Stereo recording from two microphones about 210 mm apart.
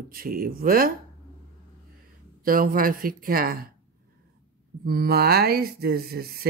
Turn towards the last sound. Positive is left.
turn(degrees=-45)  # may be behind; listen again after turning